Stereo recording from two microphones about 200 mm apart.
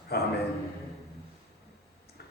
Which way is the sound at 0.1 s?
50° left (ahead or behind).